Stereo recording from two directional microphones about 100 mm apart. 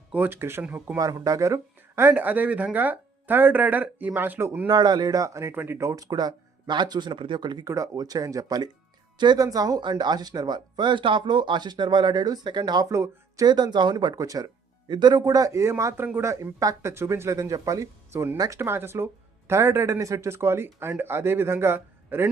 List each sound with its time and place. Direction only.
0.1 s speech: 20° right (ahead or behind)
0.6 s speech: 15° right (ahead or behind)
0.9 s speech: 35° right (ahead or behind)
4.7 s speech: 45° right (ahead or behind)
7.6 s speech: 35° right (ahead or behind)
12.9 s speech: 30° right (ahead or behind)
13.4 s speech: 45° right (ahead or behind)
18.6 s speech: 25° right (ahead or behind)